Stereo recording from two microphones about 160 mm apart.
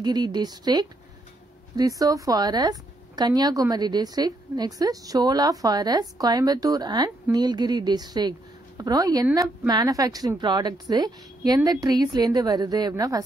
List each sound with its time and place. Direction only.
0.0 s speech: 25° right (ahead or behind)